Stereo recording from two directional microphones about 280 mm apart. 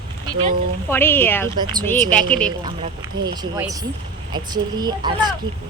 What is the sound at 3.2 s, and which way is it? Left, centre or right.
A woman's voice, centre.